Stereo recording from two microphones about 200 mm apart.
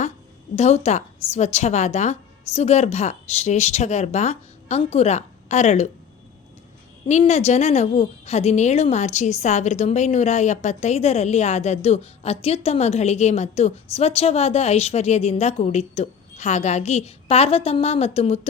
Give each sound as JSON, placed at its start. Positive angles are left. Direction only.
{"t": 0.5, "sound": "a woman's voice", "side_deg": 35}
{"t": 7.1, "sound": "a woman's voice", "side_deg": 35}